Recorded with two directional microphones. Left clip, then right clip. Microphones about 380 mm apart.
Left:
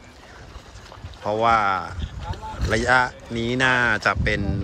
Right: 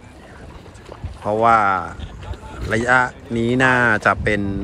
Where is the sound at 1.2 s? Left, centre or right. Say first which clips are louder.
Right 4 dB; centre.